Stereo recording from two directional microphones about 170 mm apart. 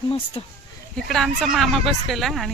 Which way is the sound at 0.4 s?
30° left (ahead or behind).